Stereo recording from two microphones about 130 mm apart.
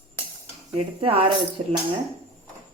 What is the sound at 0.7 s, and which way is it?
A woman's voice, 45° right (ahead or behind).